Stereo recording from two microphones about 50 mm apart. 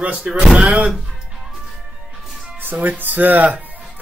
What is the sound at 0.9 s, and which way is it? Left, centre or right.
Music, centre.